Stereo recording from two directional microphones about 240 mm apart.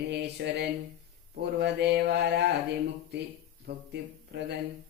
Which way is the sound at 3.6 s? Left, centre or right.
Right.